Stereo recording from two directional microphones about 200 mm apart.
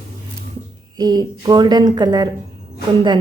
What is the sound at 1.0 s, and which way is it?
A woman's voice, 20° right (ahead or behind).